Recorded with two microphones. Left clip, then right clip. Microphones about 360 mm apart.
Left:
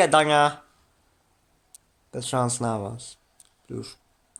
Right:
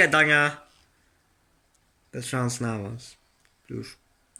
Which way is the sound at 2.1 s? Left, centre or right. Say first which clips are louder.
Left 4 dB; centre.